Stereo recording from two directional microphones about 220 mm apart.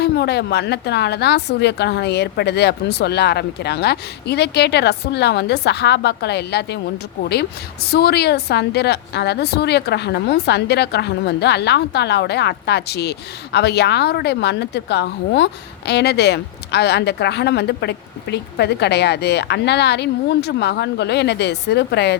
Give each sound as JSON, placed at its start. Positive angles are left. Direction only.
{"t": 0.0, "sound": "a woman's voice", "side_deg": 50}
{"t": 7.9, "sound": "a woman's voice", "side_deg": 45}